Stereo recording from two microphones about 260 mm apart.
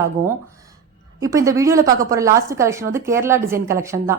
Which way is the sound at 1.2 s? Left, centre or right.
Centre.